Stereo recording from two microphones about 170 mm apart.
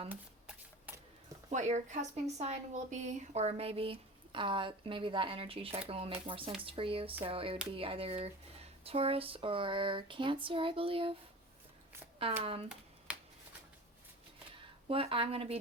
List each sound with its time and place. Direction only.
0.1 s shuffling cards: 10° right (ahead or behind)
1.5 s a woman's voice: 45° right (ahead or behind)
12.4 s a woman's voice: 35° right (ahead or behind)
14.8 s a woman's voice: 35° right (ahead or behind)